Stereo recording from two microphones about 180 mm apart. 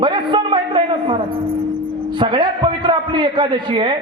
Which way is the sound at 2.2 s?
25° right (ahead or behind).